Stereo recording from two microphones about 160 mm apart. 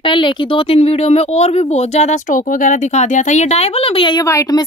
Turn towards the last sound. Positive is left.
turn(degrees=20)  # may be behind; listen again after turning